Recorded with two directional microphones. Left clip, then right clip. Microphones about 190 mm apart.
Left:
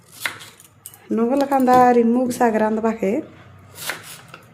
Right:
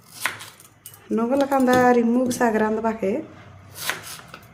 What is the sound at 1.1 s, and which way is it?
A woman's voice, 25° left (ahead or behind).